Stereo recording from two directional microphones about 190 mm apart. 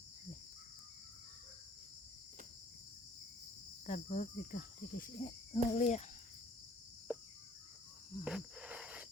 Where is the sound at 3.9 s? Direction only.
40° left (ahead or behind).